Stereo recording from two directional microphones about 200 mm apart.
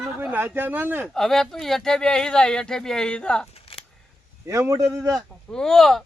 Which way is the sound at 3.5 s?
30° left (ahead or behind).